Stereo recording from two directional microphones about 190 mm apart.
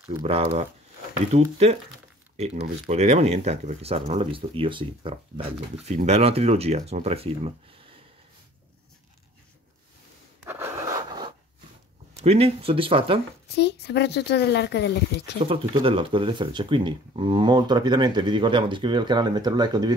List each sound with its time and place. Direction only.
0.2 s speech: 30° right (ahead or behind)
10.4 s a sound: 10° right (ahead or behind)
12.2 s speech: 30° right (ahead or behind)
13.6 s speech: 60° left (ahead or behind)
15.4 s speech: 30° right (ahead or behind)